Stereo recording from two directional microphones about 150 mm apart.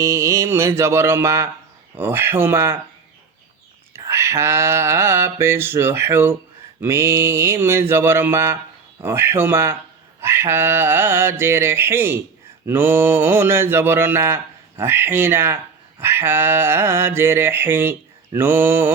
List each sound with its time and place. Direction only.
0.0 s mantra: 20° right (ahead or behind)
3.9 s mantra: 20° right (ahead or behind)